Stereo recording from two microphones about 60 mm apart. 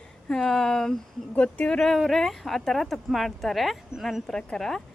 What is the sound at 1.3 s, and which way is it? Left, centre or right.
Speech, left.